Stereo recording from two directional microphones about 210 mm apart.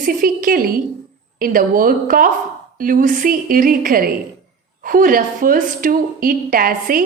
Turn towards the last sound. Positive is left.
turn(degrees=-40)  # may be behind; listen again after turning